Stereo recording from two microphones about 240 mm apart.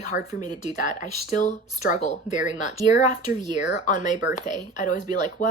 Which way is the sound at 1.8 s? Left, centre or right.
Left.